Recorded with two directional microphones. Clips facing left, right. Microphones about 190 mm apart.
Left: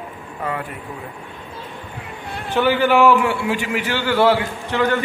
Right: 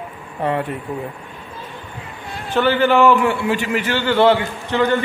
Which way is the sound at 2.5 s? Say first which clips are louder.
Right 1 dB; 10° left (ahead or behind).